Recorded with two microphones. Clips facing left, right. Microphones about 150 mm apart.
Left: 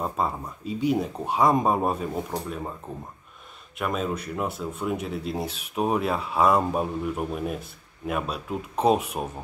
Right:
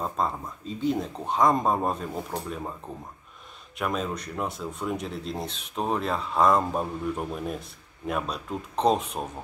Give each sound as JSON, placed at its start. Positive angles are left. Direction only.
{"t": 0.0, "sound": "speech", "side_deg": 10}
{"t": 3.7, "sound": "a man's voice", "side_deg": 0}